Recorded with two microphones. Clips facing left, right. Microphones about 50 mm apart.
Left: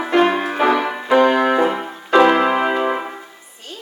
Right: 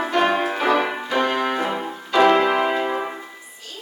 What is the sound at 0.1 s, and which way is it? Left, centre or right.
Music, centre.